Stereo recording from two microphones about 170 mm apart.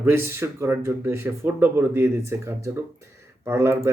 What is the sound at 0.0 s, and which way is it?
Speech, 15° right (ahead or behind).